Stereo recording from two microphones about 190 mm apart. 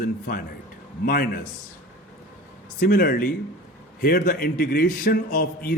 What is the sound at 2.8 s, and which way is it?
A man's voice, 50° left (ahead or behind).